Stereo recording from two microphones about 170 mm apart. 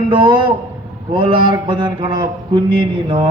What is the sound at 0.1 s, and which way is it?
Speech, 30° right (ahead or behind).